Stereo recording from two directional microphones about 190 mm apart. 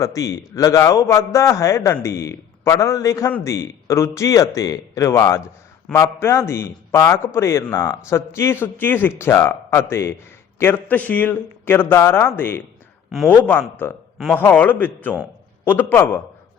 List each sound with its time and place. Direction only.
0.0 s a man's voice: 15° left (ahead or behind)